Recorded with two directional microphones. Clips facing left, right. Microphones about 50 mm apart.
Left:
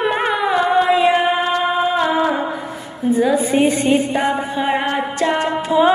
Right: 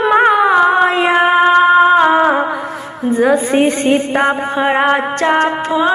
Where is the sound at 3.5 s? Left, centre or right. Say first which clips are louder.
Right 3 dB; right.